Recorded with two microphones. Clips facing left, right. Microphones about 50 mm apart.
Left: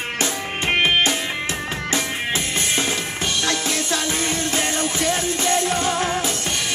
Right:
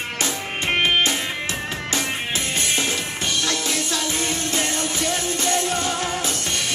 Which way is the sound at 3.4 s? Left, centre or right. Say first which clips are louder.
Left 2 dB; left.